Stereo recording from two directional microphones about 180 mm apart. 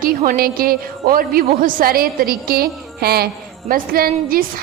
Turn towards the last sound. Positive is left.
turn(degrees=-55)  # may be behind; listen again after turning